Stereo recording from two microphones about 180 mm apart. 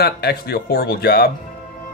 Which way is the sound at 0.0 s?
60° left (ahead or behind).